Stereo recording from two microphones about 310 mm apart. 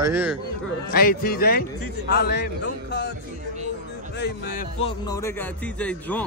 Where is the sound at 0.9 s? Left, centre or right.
Left.